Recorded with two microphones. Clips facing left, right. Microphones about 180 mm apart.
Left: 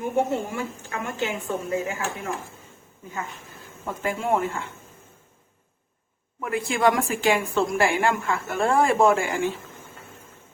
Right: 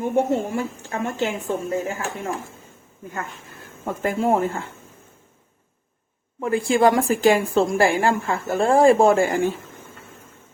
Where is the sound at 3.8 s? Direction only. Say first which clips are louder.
Right 5 dB; 45° right (ahead or behind).